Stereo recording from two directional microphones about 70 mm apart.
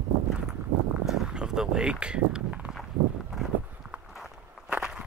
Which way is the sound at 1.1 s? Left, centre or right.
Centre.